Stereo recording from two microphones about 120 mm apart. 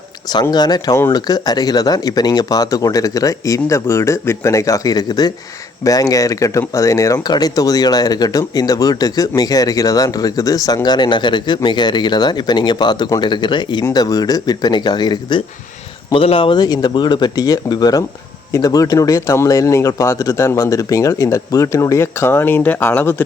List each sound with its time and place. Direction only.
0.5 s speech: 35° left (ahead or behind)
16.1 s speech: 50° left (ahead or behind); by 23.2 s 20° left (ahead or behind)